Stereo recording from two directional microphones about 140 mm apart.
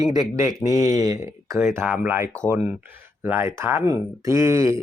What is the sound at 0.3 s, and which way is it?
Speech, 20° right (ahead or behind).